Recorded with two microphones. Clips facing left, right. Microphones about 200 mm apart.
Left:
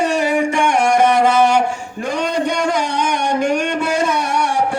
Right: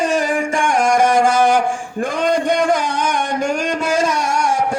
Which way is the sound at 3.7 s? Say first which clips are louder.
Even; 60° left (ahead or behind).